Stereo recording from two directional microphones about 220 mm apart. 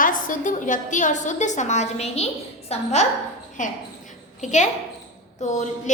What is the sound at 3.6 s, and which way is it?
A woman's voice, 35° left (ahead or behind).